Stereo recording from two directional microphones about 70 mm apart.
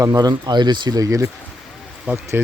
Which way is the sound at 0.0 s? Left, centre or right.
Right.